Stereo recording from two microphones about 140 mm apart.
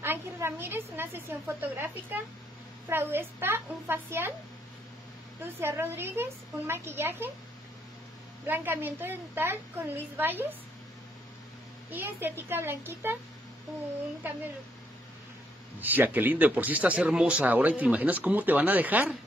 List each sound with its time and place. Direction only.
0.0 s a sound: 15° right (ahead or behind)
2.9 s speech: 15° right (ahead or behind)
5.4 s speech: 15° right (ahead or behind)
8.5 s speech: 15° right (ahead or behind)
11.9 s speech: 15° right (ahead or behind)
15.8 s speech: 15° right (ahead or behind)